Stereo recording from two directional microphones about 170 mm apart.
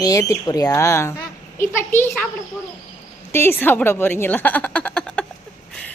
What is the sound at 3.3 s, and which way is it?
Speech, 15° left (ahead or behind).